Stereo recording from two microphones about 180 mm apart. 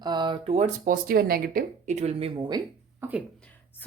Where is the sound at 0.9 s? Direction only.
55° right (ahead or behind); by 2.6 s 25° right (ahead or behind).